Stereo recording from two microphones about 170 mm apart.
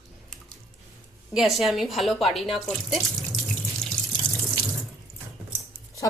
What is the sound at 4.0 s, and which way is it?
Water tap, 5° left (ahead or behind).